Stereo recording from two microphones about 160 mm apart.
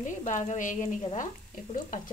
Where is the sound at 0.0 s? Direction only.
50° left (ahead or behind).